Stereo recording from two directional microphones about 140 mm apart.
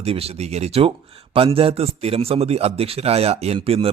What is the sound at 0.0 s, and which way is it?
Speech, 45° right (ahead or behind).